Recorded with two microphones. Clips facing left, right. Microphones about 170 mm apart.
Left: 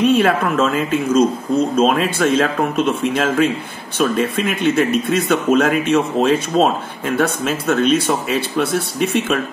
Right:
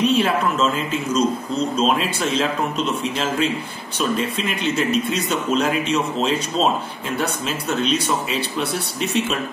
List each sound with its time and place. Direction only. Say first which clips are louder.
0.0 s speech: left 4 dB; 55° left (ahead or behind)